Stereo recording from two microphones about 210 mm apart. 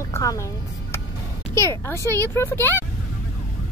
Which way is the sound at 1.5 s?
15° left (ahead or behind).